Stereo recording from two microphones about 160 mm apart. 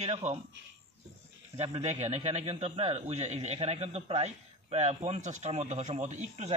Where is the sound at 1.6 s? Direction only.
45° right (ahead or behind).